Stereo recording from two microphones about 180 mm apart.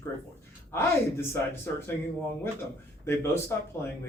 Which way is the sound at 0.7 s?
15° left (ahead or behind).